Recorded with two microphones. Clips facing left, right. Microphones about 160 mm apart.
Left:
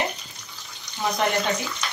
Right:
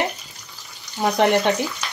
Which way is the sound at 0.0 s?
Centre (ahead or behind).